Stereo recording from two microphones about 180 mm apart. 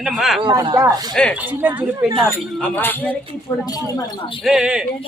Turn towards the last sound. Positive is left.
turn(degrees=-5)  # may be behind; listen again after turning